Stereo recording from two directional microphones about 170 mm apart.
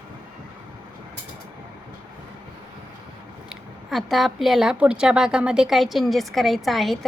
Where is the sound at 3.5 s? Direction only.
Centre (ahead or behind).